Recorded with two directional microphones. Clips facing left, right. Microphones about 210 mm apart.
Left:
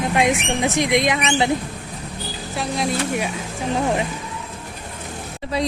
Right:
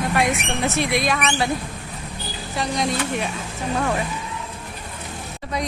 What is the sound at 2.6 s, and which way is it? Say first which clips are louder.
Speech: even; 5° left (ahead or behind).